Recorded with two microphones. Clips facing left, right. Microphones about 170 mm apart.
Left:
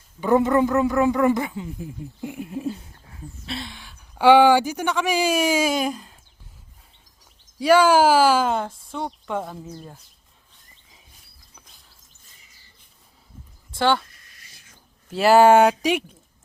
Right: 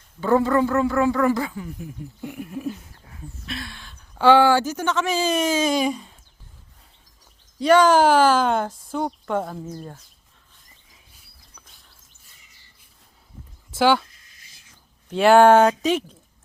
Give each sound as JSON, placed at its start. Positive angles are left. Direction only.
{"t": 0.2, "sound": "a man's voice", "side_deg": 20}
{"t": 3.7, "sound": "speech", "side_deg": 10}
{"t": 7.6, "sound": "speech", "side_deg": 10}
{"t": 13.7, "sound": "speech", "side_deg": -5}
{"t": 15.1, "sound": "speech", "side_deg": 5}